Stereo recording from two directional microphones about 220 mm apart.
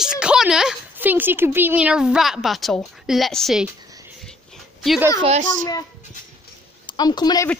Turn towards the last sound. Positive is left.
turn(degrees=20)  # may be behind; listen again after turning